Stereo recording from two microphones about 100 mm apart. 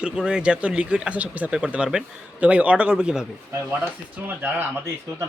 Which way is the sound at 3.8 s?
20° right (ahead or behind).